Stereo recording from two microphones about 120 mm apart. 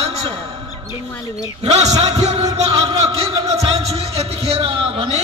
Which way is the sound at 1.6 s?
65° right (ahead or behind).